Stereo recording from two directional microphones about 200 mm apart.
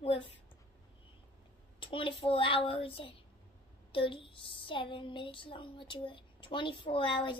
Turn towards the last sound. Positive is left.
turn(degrees=25)  # may be behind; listen again after turning